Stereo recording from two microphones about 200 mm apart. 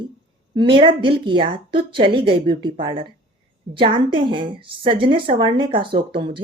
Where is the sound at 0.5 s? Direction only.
25° right (ahead or behind).